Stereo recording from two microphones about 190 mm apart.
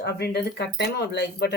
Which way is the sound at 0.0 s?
60° left (ahead or behind).